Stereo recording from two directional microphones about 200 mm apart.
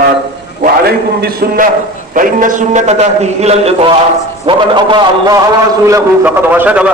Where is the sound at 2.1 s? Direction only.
40° right (ahead or behind); by 5.4 s 25° right (ahead or behind).